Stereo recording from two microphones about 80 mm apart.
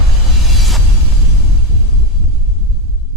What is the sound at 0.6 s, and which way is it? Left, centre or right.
Music, centre.